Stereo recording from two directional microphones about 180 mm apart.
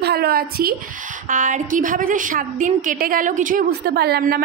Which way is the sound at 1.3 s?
45° right (ahead or behind).